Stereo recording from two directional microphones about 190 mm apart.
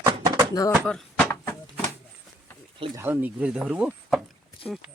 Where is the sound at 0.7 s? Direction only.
5° left (ahead or behind).